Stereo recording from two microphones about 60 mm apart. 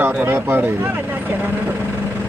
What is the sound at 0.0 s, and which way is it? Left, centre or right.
Speech, right.